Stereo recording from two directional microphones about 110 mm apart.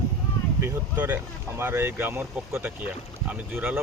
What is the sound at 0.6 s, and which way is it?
Speech, 20° right (ahead or behind).